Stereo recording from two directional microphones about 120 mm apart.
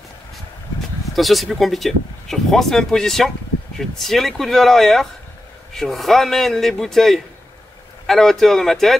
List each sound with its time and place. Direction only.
1.1 s speech: centre (ahead or behind)